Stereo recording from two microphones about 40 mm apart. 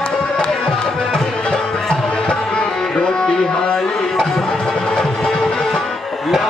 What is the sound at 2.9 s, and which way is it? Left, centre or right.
Music, centre.